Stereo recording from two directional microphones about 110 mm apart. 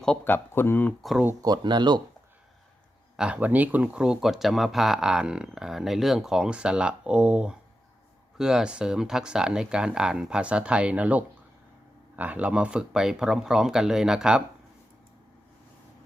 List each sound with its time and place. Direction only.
0.3 s speech: 20° left (ahead or behind)
1.4 s speech: 40° right (ahead or behind)
3.2 s speech: 10° right (ahead or behind)